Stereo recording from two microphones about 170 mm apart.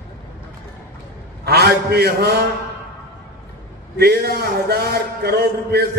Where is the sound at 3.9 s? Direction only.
70° right (ahead or behind).